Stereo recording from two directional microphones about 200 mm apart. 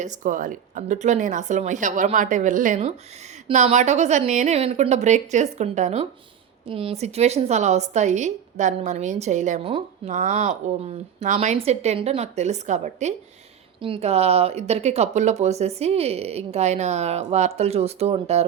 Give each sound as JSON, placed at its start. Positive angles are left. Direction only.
{"t": 0.0, "sound": "speech", "side_deg": -40}